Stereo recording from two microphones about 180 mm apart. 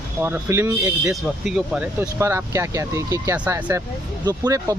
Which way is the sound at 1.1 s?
5° right (ahead or behind).